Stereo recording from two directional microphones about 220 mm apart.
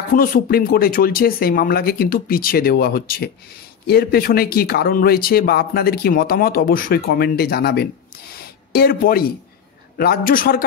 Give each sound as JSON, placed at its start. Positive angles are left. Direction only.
{"t": 0.1, "sound": "speech", "side_deg": 40}
{"t": 8.4, "sound": "a sound", "side_deg": 45}
{"t": 9.9, "sound": "a man's voice", "side_deg": 40}